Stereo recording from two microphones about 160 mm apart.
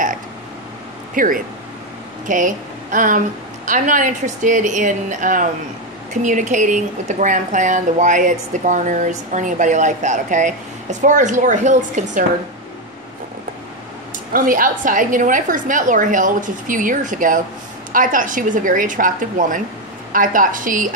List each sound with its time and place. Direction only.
1.1 s a woman's voice: 55° right (ahead or behind)
14.3 s a woman's voice: 60° right (ahead or behind)